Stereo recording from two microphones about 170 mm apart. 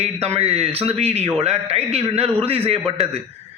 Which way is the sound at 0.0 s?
35° right (ahead or behind).